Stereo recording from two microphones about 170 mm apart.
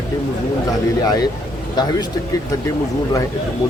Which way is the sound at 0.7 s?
20° left (ahead or behind).